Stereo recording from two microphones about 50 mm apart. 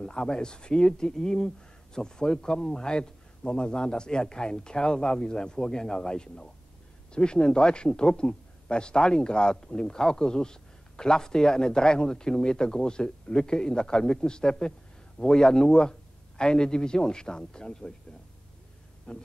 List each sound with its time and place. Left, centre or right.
0.0 s a man's voice: centre
19.1 s speech: left